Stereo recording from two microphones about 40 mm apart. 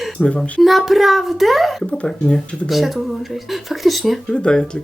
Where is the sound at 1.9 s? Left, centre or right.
Left.